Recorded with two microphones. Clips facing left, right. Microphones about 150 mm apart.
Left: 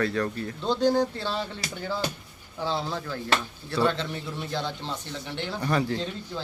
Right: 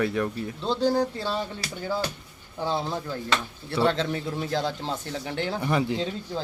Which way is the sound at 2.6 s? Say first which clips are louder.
Right 1 dB; 15° right (ahead or behind).